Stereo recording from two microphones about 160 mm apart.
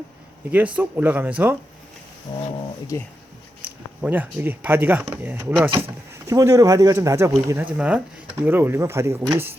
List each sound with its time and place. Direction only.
0.5 s speech: 10° right (ahead or behind)
3.6 s speech: 10° right (ahead or behind)